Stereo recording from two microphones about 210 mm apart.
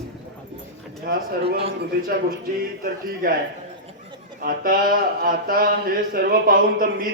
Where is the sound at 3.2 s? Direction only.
40° right (ahead or behind).